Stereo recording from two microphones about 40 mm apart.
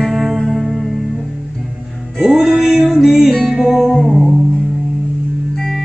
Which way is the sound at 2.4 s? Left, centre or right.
Centre.